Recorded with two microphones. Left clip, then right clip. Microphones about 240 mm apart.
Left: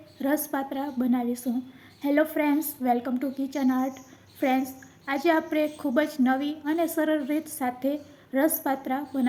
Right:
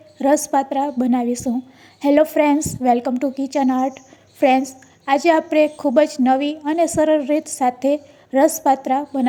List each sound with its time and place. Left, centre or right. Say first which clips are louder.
0.2 s a woman's voice: right 11 dB; right